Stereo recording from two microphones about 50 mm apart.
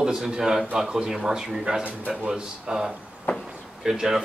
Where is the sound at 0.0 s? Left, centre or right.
Centre.